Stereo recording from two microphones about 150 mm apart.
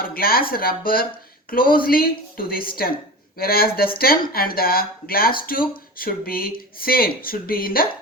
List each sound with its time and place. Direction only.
0.0 s speech: 80° left